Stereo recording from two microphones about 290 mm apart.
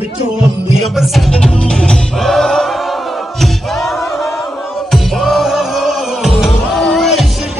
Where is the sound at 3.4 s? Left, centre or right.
Centre.